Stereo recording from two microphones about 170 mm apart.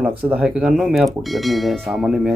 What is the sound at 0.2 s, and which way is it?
Speech, 5° right (ahead or behind).